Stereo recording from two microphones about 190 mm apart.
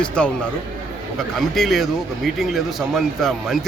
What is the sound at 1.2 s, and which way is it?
Speech, centre (ahead or behind).